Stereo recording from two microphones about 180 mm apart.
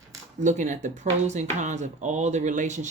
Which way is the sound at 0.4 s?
40° right (ahead or behind).